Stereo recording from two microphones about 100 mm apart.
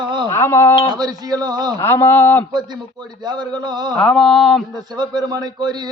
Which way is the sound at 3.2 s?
45° right (ahead or behind).